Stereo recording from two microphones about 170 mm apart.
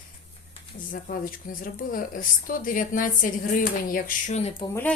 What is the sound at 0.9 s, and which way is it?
Speech, 55° left (ahead or behind).